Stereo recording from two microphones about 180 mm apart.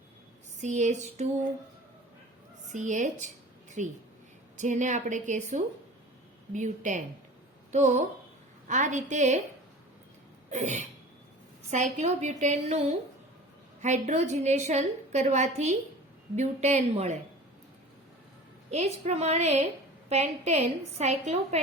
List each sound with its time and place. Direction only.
0.6 s a woman's voice: 40° right (ahead or behind)
2.7 s a woman's voice: 40° right (ahead or behind)
10.5 s a woman's voice: 40° right (ahead or behind)
18.7 s a woman's voice: 35° right (ahead or behind)